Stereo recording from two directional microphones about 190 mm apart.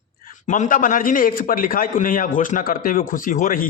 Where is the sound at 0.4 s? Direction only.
40° left (ahead or behind).